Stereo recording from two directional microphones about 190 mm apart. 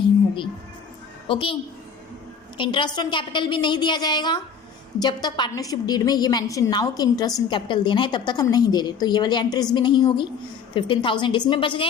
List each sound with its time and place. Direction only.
1.3 s a woman's voice: 25° left (ahead or behind)
2.6 s a woman's voice: 25° left (ahead or behind)